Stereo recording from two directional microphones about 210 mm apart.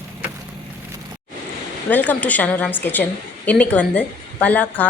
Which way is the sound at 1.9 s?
10° left (ahead or behind).